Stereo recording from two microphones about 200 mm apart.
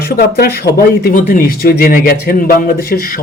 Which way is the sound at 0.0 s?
50° left (ahead or behind).